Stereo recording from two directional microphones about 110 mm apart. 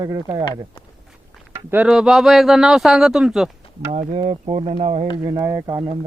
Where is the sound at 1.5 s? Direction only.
20° right (ahead or behind).